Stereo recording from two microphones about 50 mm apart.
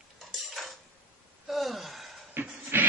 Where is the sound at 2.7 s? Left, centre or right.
Right.